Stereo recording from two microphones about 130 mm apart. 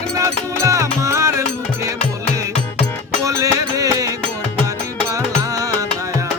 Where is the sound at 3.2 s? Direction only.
25° right (ahead or behind).